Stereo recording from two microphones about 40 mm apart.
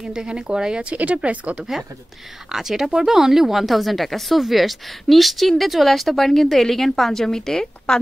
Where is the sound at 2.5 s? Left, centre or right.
Centre.